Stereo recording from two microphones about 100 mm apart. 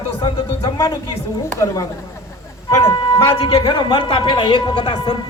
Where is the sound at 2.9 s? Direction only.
55° left (ahead or behind).